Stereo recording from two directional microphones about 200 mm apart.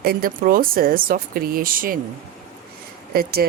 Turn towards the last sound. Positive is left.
turn(degrees=-50)  # may be behind; listen again after turning